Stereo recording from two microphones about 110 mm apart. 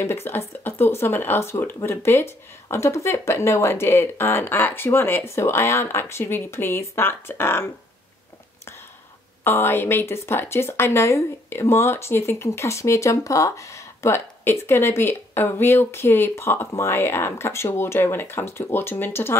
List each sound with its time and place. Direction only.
0.0 s speech: 20° left (ahead or behind)
9.4 s speech: 20° left (ahead or behind)